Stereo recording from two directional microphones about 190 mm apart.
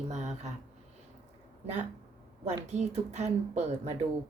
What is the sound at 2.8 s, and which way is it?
Speech, 35° right (ahead or behind).